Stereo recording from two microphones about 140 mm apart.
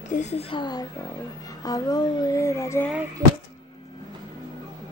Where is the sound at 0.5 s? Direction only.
30° left (ahead or behind).